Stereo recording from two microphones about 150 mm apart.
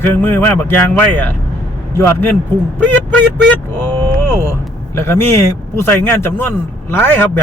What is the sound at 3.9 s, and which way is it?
Vehicle, 25° right (ahead or behind).